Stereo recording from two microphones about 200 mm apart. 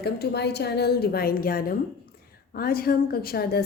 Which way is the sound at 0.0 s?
55° left (ahead or behind).